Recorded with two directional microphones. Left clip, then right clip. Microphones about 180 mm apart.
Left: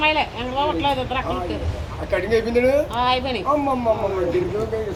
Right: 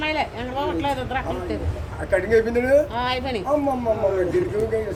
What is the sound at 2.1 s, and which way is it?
A woman's voice, 30° right (ahead or behind).